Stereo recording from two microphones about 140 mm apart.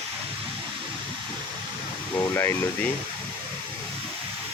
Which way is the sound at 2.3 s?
15° left (ahead or behind).